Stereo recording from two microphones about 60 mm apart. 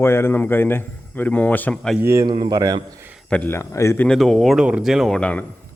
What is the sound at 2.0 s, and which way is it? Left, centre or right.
Speech, right.